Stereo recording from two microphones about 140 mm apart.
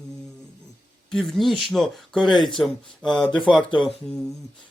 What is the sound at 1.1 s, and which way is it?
Speech, centre (ahead or behind).